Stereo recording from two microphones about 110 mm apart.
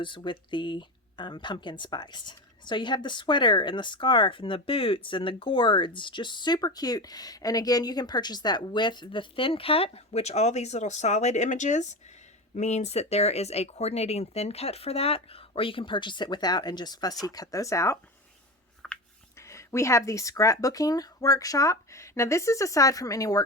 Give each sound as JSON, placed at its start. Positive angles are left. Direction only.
{"t": 0.0, "sound": "speech", "side_deg": 45}
{"t": 18.8, "sound": "a sound", "side_deg": 0}
{"t": 19.4, "sound": "speech", "side_deg": 25}